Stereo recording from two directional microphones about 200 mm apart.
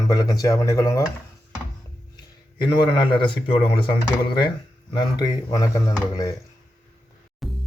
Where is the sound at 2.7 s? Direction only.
25° left (ahead or behind).